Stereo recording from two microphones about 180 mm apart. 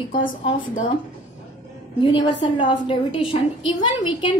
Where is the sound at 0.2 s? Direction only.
25° left (ahead or behind).